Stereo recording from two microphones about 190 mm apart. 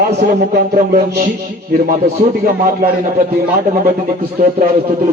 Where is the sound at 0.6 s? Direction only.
55° right (ahead or behind).